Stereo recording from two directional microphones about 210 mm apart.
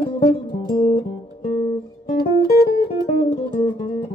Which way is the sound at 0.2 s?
40° left (ahead or behind).